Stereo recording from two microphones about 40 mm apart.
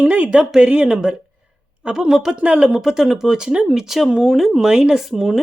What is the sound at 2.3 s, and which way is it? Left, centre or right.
Speech, right.